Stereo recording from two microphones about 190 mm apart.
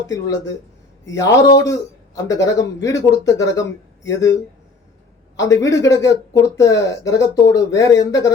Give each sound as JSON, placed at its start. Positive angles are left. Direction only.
{"t": 0.1, "sound": "speech", "side_deg": 15}
{"t": 5.4, "sound": "speech", "side_deg": 15}